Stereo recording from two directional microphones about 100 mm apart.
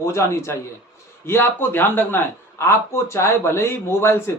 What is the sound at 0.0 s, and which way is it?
Speech, 30° left (ahead or behind).